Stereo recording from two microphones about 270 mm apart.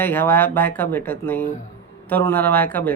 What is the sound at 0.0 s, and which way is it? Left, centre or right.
A woman's voice, centre.